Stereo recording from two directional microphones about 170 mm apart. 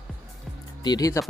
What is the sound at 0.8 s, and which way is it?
Speech, 20° left (ahead or behind).